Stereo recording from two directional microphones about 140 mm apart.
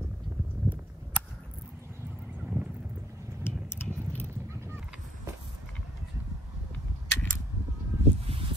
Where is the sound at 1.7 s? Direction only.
15° right (ahead or behind).